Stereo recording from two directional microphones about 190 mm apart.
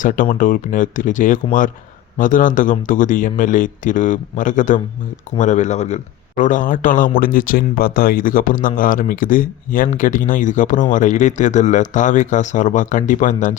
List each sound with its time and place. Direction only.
0.0 s speech: 45° left (ahead or behind)